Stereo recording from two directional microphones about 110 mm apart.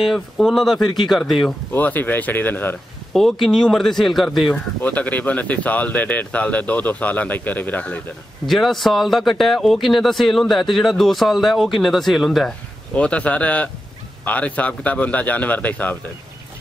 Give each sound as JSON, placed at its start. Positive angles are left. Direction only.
{"t": 0.0, "sound": "speech", "side_deg": 0}
{"t": 1.7, "sound": "speech", "side_deg": 15}
{"t": 3.1, "sound": "speech", "side_deg": 0}
{"t": 4.8, "sound": "speech", "side_deg": 15}
{"t": 8.5, "sound": "speech", "side_deg": 0}
{"t": 12.9, "sound": "speech", "side_deg": 10}